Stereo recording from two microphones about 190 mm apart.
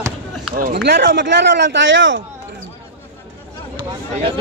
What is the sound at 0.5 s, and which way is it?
Speech, 55° right (ahead or behind).